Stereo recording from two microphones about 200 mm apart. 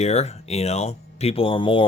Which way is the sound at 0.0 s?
35° left (ahead or behind).